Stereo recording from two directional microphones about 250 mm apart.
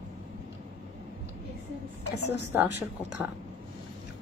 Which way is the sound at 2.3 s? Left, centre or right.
Centre.